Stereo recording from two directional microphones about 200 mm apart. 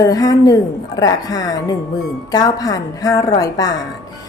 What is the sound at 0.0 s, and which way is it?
A woman's voice, 20° left (ahead or behind).